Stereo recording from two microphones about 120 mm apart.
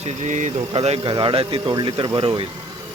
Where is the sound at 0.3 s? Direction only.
90° right.